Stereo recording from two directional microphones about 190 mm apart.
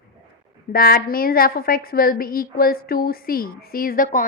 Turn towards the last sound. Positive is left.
turn(degrees=45)  # may be behind; listen again after turning